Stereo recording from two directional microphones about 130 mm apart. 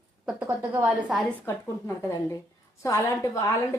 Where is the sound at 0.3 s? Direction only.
10° right (ahead or behind).